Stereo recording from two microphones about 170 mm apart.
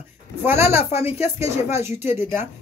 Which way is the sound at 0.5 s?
15° right (ahead or behind).